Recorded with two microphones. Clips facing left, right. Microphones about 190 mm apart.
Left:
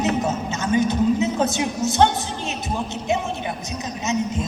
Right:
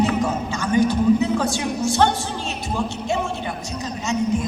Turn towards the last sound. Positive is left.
turn(degrees=20)  # may be behind; listen again after turning